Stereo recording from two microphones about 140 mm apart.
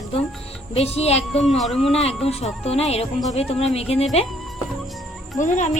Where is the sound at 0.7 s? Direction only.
45° left (ahead or behind).